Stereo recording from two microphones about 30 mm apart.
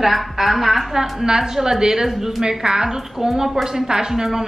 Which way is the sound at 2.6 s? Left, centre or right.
Right.